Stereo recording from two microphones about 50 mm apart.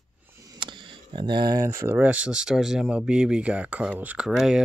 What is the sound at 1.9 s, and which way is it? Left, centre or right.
Speech, right.